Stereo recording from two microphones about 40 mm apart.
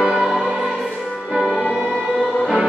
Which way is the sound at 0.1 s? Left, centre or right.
Centre.